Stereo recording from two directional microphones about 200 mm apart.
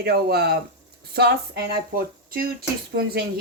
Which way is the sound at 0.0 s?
50° right (ahead or behind).